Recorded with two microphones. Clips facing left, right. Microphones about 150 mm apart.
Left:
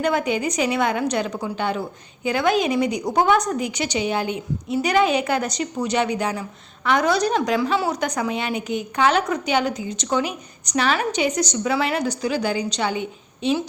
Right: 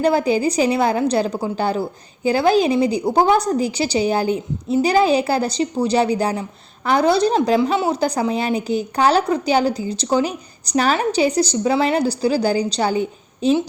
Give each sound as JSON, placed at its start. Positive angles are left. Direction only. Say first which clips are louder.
{"t": 0.0, "sound": "a woman's voice", "louder": "right 5 dB", "side_deg": -35}